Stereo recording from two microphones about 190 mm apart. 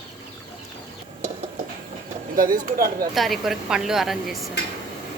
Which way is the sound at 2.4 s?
45° right (ahead or behind).